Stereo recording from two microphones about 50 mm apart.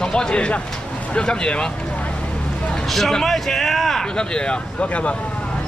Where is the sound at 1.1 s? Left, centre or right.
Centre.